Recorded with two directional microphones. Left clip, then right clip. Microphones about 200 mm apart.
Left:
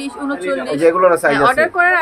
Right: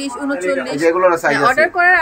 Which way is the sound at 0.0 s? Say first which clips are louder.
Right 2 dB; 5° right (ahead or behind).